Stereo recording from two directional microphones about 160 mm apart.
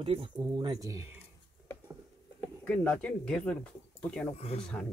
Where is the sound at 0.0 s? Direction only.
35° right (ahead or behind).